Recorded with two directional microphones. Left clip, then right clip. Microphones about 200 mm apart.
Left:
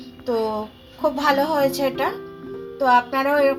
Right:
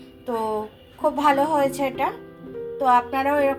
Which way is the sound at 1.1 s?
30° left (ahead or behind).